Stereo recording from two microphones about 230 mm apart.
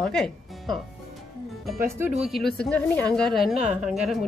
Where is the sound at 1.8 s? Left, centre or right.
Centre.